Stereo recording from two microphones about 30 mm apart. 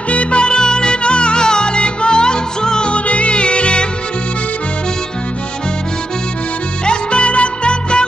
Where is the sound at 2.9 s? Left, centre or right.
Left.